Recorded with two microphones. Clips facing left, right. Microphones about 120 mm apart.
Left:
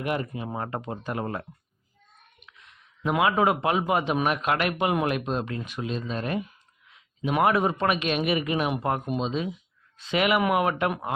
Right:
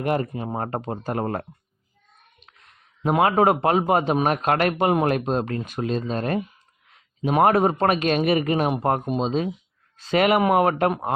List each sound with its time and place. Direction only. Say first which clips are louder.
0.0 s a man's voice: right 5 dB; 40° right (ahead or behind)
2.5 s a man's voice: left 2 dB; 40° right (ahead or behind)